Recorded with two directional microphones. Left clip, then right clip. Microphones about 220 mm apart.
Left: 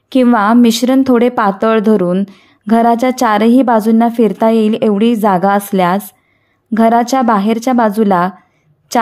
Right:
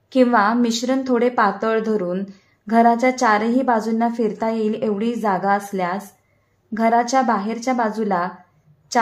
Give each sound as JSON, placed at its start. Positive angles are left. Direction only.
{"t": 0.1, "sound": "speech", "side_deg": 35}